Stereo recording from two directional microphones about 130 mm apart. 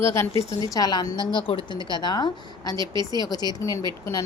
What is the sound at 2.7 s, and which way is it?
Speech, 35° right (ahead or behind).